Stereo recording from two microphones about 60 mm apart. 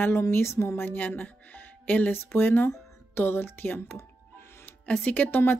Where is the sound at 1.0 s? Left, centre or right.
Left.